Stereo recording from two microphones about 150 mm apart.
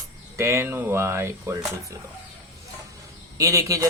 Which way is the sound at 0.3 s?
20° right (ahead or behind).